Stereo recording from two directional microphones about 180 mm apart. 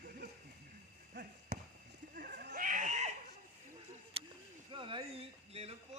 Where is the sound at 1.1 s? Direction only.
60° right (ahead or behind).